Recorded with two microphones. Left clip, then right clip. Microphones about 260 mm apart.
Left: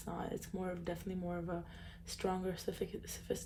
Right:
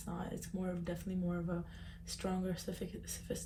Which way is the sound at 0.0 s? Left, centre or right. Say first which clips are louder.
Left 2 dB; left.